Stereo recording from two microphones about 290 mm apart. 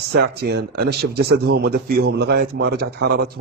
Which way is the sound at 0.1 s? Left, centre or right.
Right.